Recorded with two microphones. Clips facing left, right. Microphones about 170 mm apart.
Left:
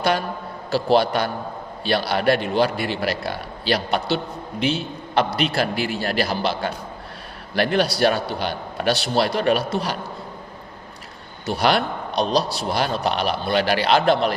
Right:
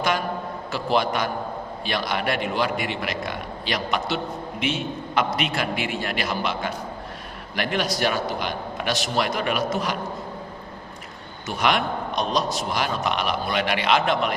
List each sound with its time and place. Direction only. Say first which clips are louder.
0.7 s a man's voice: left 5 dB; 35° left (ahead or behind)
11.4 s a man's voice: left 3 dB; 35° left (ahead or behind)